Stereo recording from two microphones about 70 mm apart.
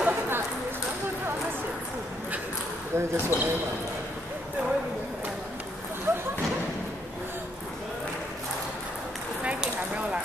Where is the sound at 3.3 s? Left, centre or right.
Left.